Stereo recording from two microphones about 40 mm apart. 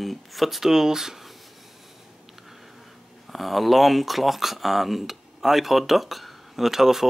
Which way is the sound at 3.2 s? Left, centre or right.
Centre.